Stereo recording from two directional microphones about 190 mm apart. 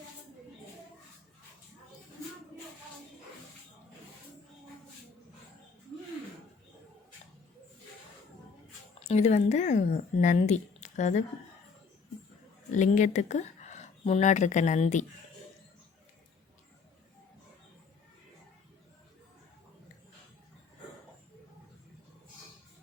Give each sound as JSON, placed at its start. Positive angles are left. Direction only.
{"t": 9.0, "sound": "speech", "side_deg": 35}
{"t": 12.7, "sound": "speech", "side_deg": 40}